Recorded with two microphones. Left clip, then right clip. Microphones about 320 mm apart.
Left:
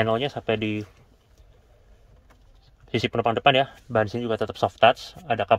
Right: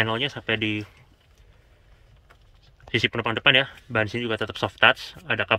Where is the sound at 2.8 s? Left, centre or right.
Centre.